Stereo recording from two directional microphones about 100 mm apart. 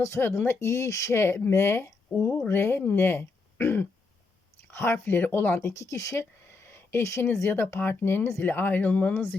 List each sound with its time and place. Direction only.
0.0 s speech: 25° left (ahead or behind)